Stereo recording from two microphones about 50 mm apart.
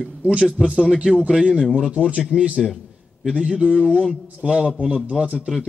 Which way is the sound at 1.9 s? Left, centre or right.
Right.